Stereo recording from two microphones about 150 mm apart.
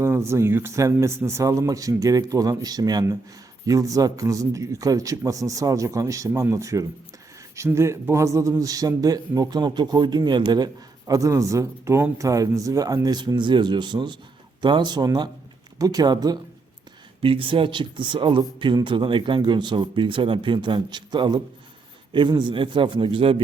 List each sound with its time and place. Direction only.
0.0 s a man's voice: 20° right (ahead or behind); by 23.4 s 35° right (ahead or behind)